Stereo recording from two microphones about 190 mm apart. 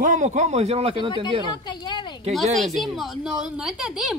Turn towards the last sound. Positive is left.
turn(degrees=-5)  # may be behind; listen again after turning